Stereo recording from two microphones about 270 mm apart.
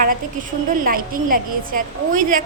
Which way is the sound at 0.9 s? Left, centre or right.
Right.